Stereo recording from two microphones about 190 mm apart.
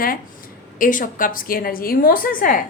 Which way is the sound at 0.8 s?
45° left (ahead or behind).